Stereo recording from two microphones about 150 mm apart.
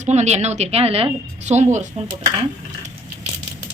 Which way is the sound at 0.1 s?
45° right (ahead or behind).